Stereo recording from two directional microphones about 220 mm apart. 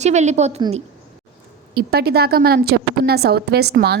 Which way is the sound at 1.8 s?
45° right (ahead or behind).